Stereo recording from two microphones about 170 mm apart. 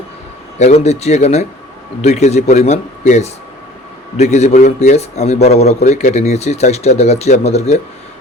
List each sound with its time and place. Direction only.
0.6 s a man's voice: 40° left (ahead or behind)